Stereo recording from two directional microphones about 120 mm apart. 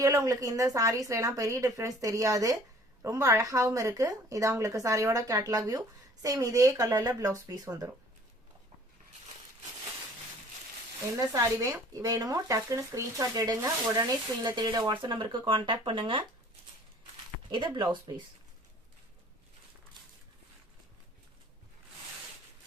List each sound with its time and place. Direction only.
0.0 s speech: 30° right (ahead or behind)
11.3 s speech: 25° right (ahead or behind); by 16.2 s 45° right (ahead or behind)
17.5 s speech: 40° right (ahead or behind)